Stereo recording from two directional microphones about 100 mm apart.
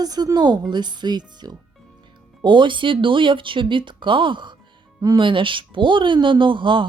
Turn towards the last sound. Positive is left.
turn(degrees=-55)  # may be behind; listen again after turning